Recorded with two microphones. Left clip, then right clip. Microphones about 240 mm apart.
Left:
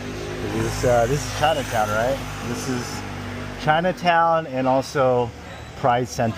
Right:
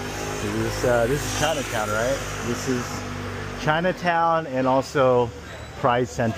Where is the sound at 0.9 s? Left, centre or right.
Centre.